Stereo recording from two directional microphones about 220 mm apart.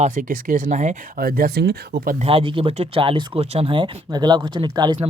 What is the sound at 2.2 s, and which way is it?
Speech, 25° right (ahead or behind).